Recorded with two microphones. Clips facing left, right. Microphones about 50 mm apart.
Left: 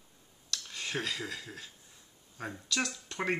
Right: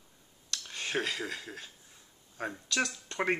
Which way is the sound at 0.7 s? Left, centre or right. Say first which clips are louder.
Right 3 dB; right.